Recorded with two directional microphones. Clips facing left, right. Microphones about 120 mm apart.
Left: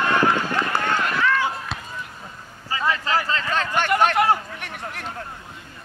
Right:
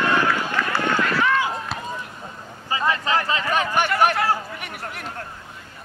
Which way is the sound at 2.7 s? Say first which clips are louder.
Right 1 dB; 20° right (ahead or behind).